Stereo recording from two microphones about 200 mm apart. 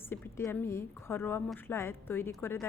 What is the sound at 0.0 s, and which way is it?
A woman's voice, 10° left (ahead or behind).